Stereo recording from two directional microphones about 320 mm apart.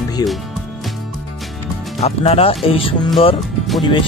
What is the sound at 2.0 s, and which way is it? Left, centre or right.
Speech, centre.